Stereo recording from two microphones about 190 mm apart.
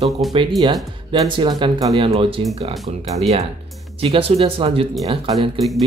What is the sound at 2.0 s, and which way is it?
Speech, 30° right (ahead or behind).